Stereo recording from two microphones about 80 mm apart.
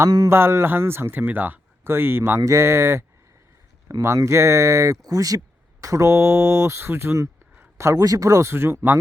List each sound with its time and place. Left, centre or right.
0.3 s speech: right
4.0 s speech: right
7.8 s speech: right